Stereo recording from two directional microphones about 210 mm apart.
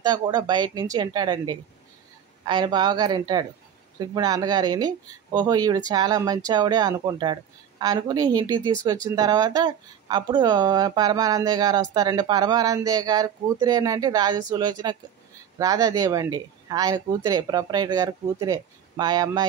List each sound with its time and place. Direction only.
0.0 s speech: 20° right (ahead or behind)